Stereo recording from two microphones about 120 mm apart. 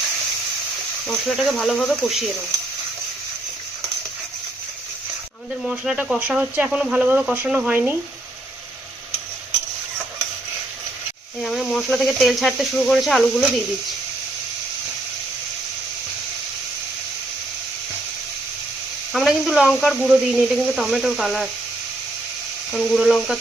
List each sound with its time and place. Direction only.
1.0 s speech: centre (ahead or behind)
5.6 s speech: 5° right (ahead or behind)
11.4 s speech: centre (ahead or behind)
19.1 s speech: centre (ahead or behind)
22.7 s speech: centre (ahead or behind)